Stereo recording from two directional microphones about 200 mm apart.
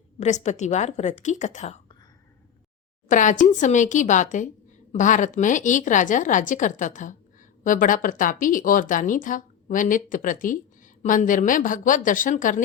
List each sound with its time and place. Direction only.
0.2 s a woman's voice: 35° left (ahead or behind)
3.1 s a woman's voice: 40° left (ahead or behind)